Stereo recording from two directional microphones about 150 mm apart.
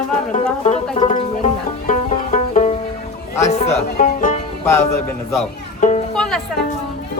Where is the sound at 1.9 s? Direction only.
55° left (ahead or behind).